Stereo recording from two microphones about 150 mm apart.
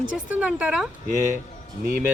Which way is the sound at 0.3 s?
10° right (ahead or behind).